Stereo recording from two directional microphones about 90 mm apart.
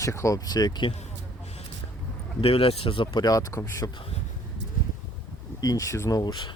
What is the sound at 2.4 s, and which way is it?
Speech, 90° left.